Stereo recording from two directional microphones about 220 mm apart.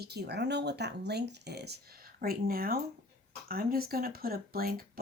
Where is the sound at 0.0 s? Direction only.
50° right (ahead or behind).